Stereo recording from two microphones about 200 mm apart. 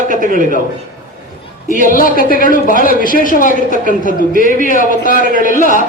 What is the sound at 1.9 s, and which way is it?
Speech, 45° left (ahead or behind).